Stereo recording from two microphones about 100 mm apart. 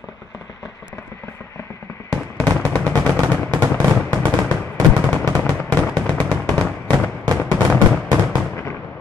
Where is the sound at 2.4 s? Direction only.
15° left (ahead or behind).